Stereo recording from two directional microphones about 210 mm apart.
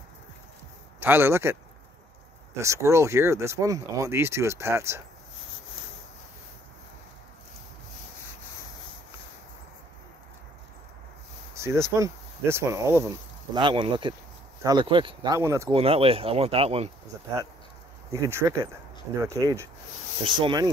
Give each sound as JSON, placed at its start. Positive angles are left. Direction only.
{"t": 0.9, "sound": "speech", "side_deg": -10}
{"t": 11.5, "sound": "speech", "side_deg": -15}
{"t": 15.7, "sound": "speech", "side_deg": -25}
{"t": 18.1, "sound": "speech", "side_deg": -15}